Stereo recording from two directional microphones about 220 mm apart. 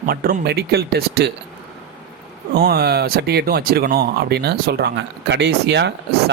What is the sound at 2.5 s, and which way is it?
Speech, 45° right (ahead or behind).